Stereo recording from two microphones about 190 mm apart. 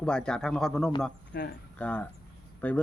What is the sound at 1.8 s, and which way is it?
Speech, 5° left (ahead or behind).